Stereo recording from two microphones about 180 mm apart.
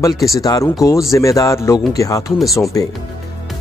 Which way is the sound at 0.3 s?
20° left (ahead or behind).